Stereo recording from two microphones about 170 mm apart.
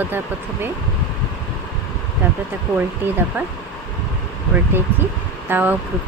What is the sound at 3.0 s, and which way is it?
Speech, 10° right (ahead or behind).